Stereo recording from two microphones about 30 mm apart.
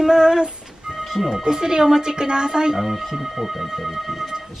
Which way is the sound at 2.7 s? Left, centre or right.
Centre.